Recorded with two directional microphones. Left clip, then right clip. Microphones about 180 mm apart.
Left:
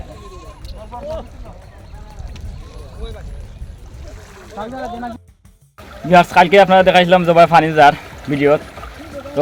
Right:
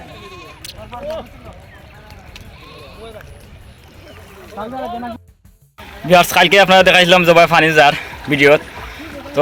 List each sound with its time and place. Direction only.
0.9 s speech: 45° right (ahead or behind)
4.5 s speech: 10° left (ahead or behind)
6.1 s a man's voice: centre (ahead or behind)